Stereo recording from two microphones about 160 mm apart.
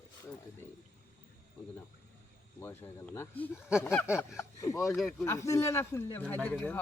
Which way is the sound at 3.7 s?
5° right (ahead or behind).